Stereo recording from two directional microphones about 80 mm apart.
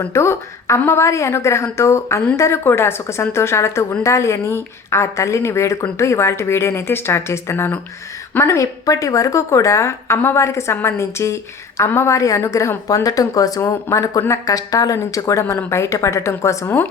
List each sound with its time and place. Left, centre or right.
0.0 s a woman's voice: left